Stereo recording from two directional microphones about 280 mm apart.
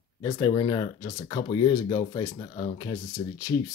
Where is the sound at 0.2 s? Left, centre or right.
Centre.